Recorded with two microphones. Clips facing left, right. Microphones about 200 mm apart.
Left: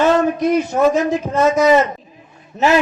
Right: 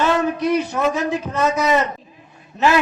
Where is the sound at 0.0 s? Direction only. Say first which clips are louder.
Left 4 dB; 50° left (ahead or behind).